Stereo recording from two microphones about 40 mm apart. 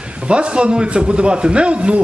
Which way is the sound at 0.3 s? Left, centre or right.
Right.